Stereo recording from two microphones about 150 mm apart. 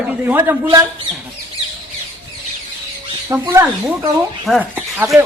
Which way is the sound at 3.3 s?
20° right (ahead or behind).